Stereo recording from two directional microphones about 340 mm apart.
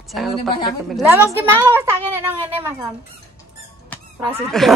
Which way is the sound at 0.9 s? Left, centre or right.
Centre.